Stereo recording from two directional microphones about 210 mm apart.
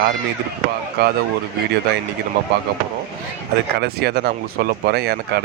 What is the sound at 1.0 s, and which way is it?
Speech, 50° right (ahead or behind).